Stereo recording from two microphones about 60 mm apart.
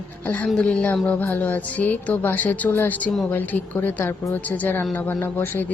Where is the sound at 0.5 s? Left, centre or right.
Centre.